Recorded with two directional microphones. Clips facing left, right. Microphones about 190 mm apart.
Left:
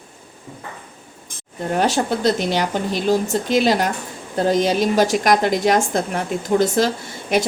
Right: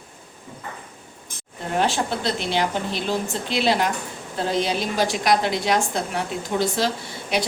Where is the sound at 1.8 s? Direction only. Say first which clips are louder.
Left 6 dB; 40° left (ahead or behind).